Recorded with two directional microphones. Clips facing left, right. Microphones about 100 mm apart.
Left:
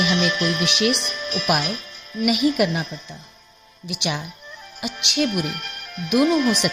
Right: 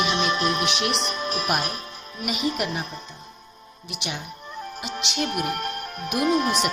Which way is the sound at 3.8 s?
90° left.